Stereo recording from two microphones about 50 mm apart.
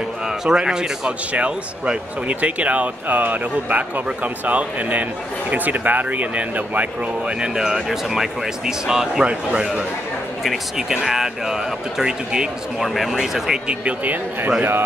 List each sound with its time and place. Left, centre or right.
0.3 s speech: centre
1.3 s speech: right
7.2 s speech: centre
9.2 s a man's voice: right
10.8 s speech: centre
12.7 s speech: centre
13.7 s speech: right